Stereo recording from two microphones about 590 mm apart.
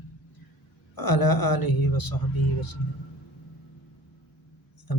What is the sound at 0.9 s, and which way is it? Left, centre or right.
A man's voice, left.